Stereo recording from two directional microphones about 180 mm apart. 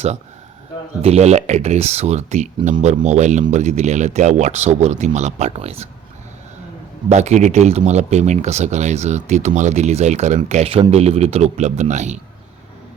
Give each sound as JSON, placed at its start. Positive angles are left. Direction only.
{"t": 1.0, "sound": "speech", "side_deg": -35}
{"t": 7.1, "sound": "speech", "side_deg": -40}